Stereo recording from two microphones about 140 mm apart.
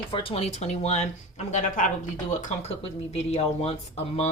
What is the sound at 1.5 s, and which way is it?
Speech, 65° left (ahead or behind).